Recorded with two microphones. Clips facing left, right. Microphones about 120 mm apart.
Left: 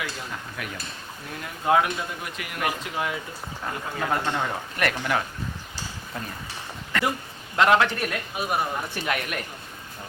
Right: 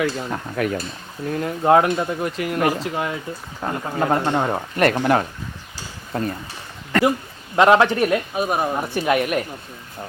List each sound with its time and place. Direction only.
0.0 s speech: 50° right (ahead or behind)
7.5 s speech: 25° right (ahead or behind)